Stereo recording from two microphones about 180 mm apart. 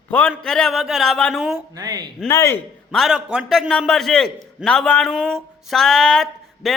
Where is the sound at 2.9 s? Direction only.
Centre (ahead or behind).